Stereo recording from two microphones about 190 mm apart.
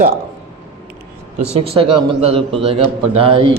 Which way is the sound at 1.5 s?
30° right (ahead or behind).